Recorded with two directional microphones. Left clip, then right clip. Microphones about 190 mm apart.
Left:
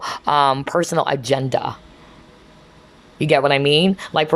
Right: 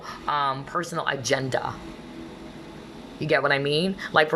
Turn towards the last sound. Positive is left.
turn(degrees=15)  # may be behind; listen again after turning